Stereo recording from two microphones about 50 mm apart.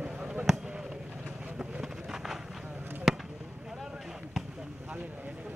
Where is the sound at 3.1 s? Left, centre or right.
Centre.